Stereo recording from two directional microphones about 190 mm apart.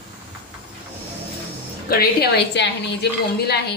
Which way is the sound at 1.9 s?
55° left (ahead or behind).